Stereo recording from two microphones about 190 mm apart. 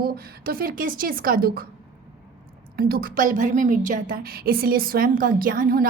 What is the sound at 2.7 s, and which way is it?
A woman's voice, 55° right (ahead or behind).